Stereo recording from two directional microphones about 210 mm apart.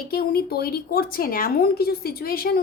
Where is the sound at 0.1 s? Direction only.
45° left (ahead or behind).